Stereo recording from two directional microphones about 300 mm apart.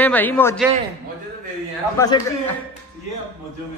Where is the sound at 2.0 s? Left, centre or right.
Centre.